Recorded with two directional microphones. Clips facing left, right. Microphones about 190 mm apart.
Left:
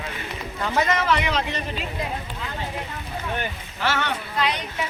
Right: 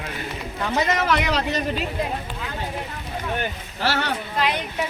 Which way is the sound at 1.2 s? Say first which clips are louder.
Right 3 dB; 40° right (ahead or behind).